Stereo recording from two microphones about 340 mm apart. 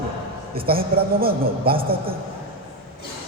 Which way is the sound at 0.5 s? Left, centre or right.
Right.